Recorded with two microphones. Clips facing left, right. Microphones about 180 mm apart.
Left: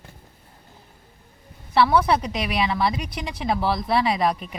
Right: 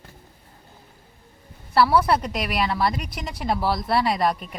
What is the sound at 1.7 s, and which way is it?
A woman's voice, centre (ahead or behind).